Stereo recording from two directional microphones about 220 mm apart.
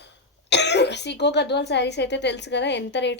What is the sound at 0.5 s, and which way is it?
Speech, 50° left (ahead or behind).